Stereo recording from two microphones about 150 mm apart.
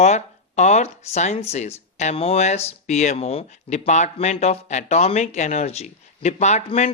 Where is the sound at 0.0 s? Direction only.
50° left (ahead or behind).